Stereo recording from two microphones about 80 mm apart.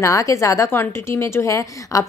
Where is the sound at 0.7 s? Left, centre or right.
Left.